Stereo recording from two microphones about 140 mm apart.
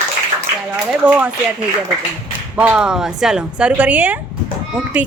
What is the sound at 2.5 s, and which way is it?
A woman's voice, 10° right (ahead or behind).